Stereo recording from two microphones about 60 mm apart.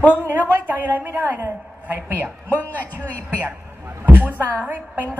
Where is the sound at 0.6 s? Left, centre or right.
Right.